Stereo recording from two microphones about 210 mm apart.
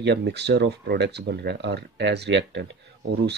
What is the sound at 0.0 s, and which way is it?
Speech, 55° right (ahead or behind).